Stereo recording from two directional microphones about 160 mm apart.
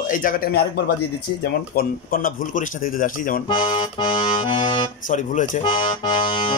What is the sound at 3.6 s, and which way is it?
Accordion, 50° left (ahead or behind).